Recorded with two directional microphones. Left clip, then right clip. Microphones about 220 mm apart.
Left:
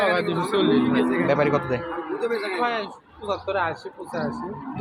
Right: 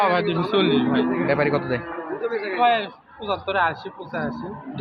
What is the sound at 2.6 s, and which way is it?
Speech, 30° right (ahead or behind).